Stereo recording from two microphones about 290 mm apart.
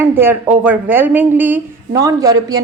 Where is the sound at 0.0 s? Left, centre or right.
Centre.